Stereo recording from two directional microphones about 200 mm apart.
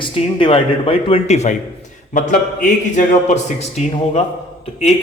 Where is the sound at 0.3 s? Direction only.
25° left (ahead or behind).